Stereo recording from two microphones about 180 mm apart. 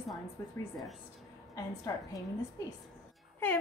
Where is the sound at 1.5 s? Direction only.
20° left (ahead or behind).